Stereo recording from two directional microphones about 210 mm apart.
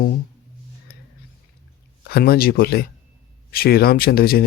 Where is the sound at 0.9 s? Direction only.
45° left (ahead or behind).